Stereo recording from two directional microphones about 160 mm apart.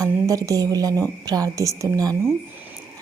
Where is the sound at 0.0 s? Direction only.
20° right (ahead or behind).